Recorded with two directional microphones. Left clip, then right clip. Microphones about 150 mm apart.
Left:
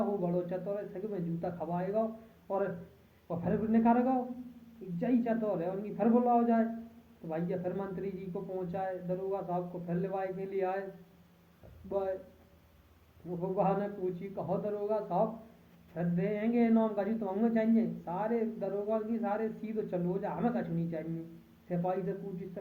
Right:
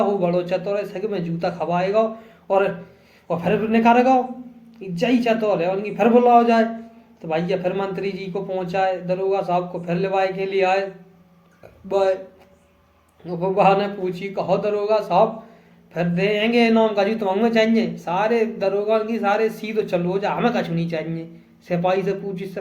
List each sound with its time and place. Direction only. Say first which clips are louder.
0.2 s speech: right 14 dB; 25° right (ahead or behind)
3.2 s speech: right 13 dB; 30° right (ahead or behind)
11.9 s speech: right 15 dB; 25° right (ahead or behind)
13.4 s speech: right 15 dB; 30° right (ahead or behind)